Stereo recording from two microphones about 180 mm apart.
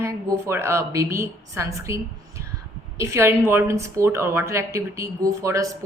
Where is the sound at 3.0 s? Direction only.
15° right (ahead or behind).